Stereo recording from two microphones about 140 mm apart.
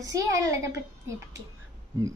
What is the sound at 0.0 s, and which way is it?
Speech, 25° right (ahead or behind).